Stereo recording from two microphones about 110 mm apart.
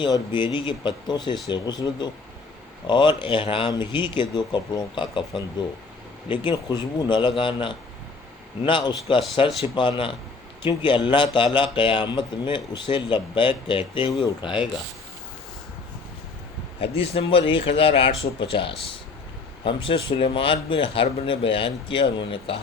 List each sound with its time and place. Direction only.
0.0 s speech: 45° left (ahead or behind)
6.2 s speech: 45° left (ahead or behind)
16.8 s speech: 55° left (ahead or behind)